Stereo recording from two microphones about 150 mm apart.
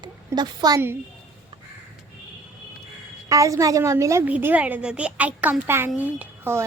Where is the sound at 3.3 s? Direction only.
20° right (ahead or behind).